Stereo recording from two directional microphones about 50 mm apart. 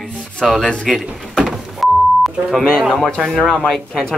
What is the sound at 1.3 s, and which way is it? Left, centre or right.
Door, centre.